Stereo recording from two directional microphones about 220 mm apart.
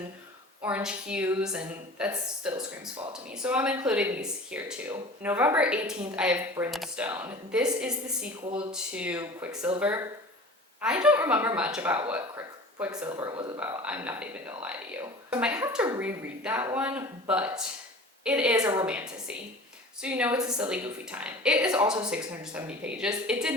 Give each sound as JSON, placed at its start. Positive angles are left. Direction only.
{"t": 0.6, "sound": "a woman's voice", "side_deg": -5}
{"t": 13.6, "sound": "a woman's voice", "side_deg": -5}